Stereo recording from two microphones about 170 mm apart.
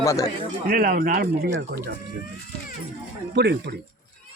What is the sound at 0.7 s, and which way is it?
Speech, 55° right (ahead or behind).